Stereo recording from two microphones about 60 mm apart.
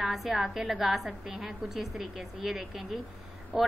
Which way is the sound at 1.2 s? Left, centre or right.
Centre.